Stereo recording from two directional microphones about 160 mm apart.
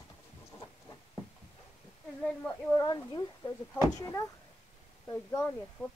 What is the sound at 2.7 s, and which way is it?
Speech, 20° left (ahead or behind).